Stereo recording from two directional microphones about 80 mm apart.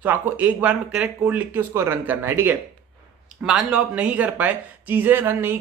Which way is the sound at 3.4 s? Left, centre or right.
Centre.